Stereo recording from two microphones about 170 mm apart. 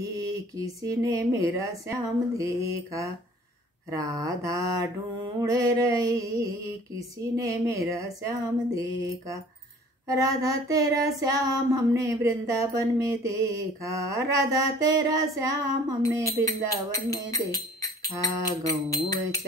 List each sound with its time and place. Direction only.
0.0 s female singing: 20° right (ahead or behind)
16.3 s speech: 20° left (ahead or behind)